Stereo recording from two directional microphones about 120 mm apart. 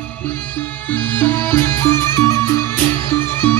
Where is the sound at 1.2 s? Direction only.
20° left (ahead or behind).